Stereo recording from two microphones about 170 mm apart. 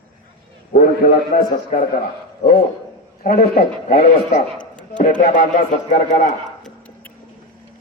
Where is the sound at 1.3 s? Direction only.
65° left (ahead or behind).